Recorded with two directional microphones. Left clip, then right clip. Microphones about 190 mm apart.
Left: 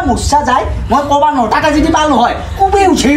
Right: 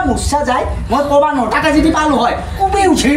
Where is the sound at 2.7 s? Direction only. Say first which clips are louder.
Left 2 dB; 10° left (ahead or behind).